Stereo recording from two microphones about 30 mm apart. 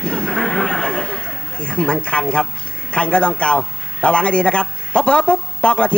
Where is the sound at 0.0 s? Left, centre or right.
Left.